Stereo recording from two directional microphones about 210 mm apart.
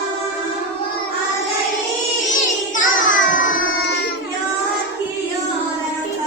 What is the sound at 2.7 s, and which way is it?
Child singing, 40° left (ahead or behind).